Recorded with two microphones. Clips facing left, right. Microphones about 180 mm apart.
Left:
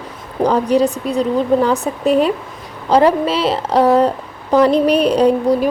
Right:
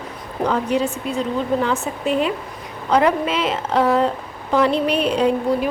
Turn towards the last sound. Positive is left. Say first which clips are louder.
# left 5 dB
turn(degrees=40)  # may be behind; listen again after turning